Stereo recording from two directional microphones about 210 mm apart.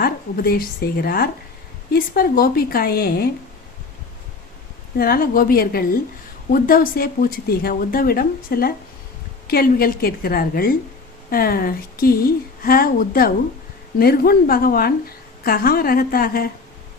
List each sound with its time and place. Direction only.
0.0 s a woman's voice: 45° left (ahead or behind)
4.9 s a woman's voice: 45° left (ahead or behind)